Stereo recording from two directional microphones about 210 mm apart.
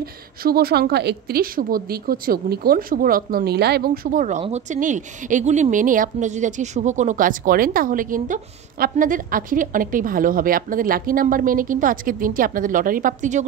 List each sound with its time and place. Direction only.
0.0 s a woman's voice: 45° right (ahead or behind)